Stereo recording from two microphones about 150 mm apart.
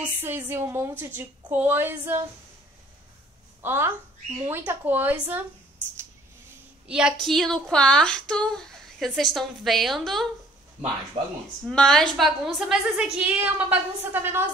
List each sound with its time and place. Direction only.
0.2 s a woman's voice: 15° right (ahead or behind)
3.6 s a woman's voice: 15° right (ahead or behind)
6.9 s a woman's voice: 5° right (ahead or behind)
11.2 s speech: 40° right (ahead or behind)
11.6 s a woman's voice: 5° left (ahead or behind); by 14.5 s 15° right (ahead or behind)